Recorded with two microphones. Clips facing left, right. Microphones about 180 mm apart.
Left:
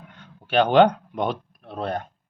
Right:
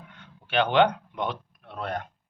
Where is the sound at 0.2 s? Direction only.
40° left (ahead or behind).